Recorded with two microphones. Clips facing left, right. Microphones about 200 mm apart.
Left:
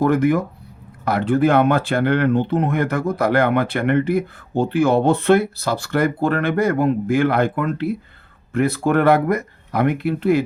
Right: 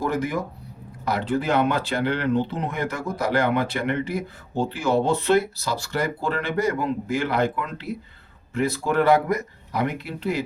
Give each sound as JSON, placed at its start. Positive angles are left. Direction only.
{"t": 0.0, "sound": "speech", "side_deg": 55}